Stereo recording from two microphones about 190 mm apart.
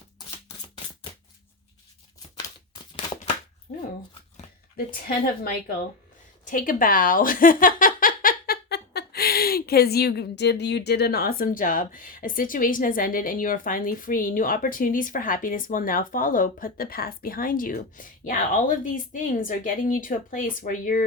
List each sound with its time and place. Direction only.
3.7 s dog: 40° left (ahead or behind)
4.9 s speech: 50° left (ahead or behind)